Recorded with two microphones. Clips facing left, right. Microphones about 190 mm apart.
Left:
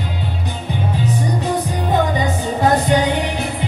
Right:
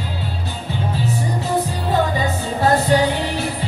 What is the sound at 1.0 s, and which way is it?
Music, 20° left (ahead or behind).